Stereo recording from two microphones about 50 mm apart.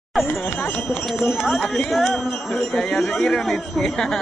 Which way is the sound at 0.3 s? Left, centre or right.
Left.